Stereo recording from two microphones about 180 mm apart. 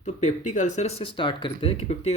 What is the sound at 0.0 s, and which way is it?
Speech, 40° left (ahead or behind).